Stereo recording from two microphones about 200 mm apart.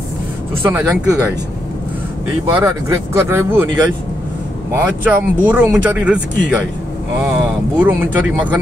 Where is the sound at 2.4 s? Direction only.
15° right (ahead or behind).